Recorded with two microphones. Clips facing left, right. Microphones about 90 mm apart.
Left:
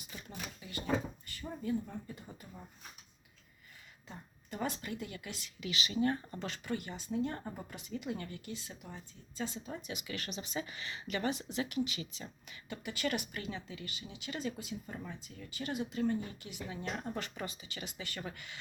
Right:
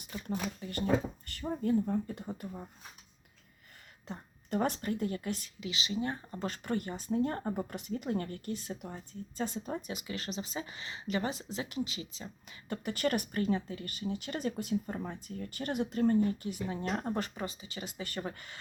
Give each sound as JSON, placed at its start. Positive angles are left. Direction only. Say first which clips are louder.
{"t": 0.1, "sound": "speech", "louder": "right 10 dB", "side_deg": -55}
{"t": 4.1, "sound": "speech", "louder": "right 11 dB", "side_deg": -55}
{"t": 4.9, "sound": "speech", "louder": "right 8 dB", "side_deg": -40}
{"t": 5.5, "sound": "speech", "louder": "left 6 dB", "side_deg": -25}
{"t": 6.4, "sound": "speech", "louder": "right 4 dB", "side_deg": -45}
{"t": 9.9, "sound": "speech", "louder": "right 3 dB", "side_deg": -30}
{"t": 12.6, "sound": "speech", "louder": "right 5 dB", "side_deg": -45}